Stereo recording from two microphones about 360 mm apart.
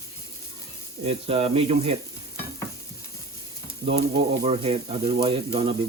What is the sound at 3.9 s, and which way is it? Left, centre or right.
Speech, centre.